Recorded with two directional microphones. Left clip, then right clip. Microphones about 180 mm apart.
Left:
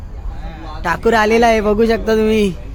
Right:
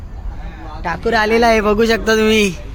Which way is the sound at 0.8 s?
40° left (ahead or behind).